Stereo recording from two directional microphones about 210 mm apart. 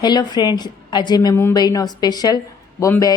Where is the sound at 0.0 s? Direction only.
20° left (ahead or behind).